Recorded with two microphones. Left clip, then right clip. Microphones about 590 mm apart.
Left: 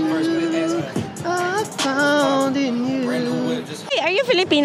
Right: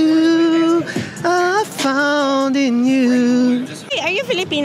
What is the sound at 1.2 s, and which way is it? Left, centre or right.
Child singing, right.